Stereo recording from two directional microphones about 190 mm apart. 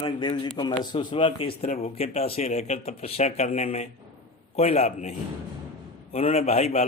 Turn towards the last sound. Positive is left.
turn(degrees=35)  # may be behind; listen again after turning